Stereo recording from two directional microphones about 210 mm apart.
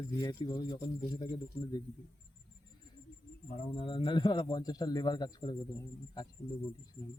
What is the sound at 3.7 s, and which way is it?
Speech, 25° left (ahead or behind).